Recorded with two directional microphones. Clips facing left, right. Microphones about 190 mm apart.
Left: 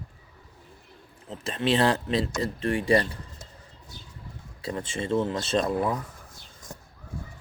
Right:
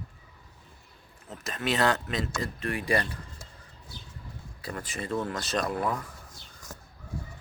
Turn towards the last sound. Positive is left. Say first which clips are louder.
# left 2 dB
turn(degrees=20)  # may be behind; listen again after turning